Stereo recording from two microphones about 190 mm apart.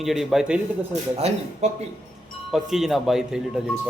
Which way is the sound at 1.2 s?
35° right (ahead or behind).